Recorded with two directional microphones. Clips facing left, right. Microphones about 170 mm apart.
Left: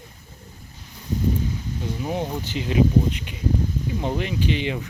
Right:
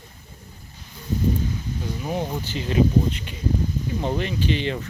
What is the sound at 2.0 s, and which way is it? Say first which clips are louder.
Speech: even; 15° left (ahead or behind).